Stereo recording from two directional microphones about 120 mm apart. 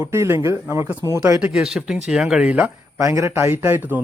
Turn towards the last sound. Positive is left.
turn(degrees=-15)  # may be behind; listen again after turning